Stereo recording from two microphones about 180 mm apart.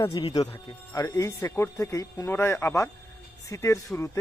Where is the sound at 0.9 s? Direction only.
15° left (ahead or behind).